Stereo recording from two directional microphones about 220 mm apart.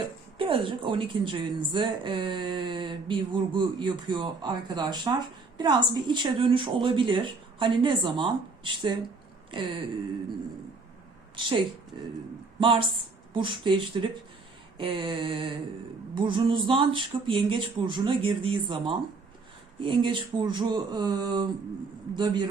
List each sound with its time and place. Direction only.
0.3 s a woman's voice: 25° right (ahead or behind)
11.3 s a woman's voice: 20° right (ahead or behind)